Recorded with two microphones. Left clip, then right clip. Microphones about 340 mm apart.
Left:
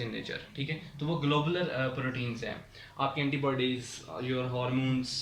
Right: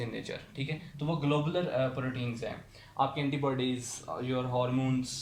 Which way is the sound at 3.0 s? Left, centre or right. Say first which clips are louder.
Right 1 dB; centre.